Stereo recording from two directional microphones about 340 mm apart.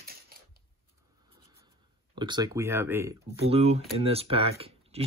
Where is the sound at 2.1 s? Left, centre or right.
Centre.